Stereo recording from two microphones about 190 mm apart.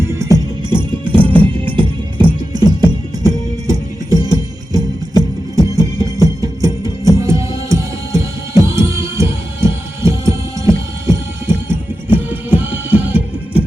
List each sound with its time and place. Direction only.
0.1 s music: 15° right (ahead or behind)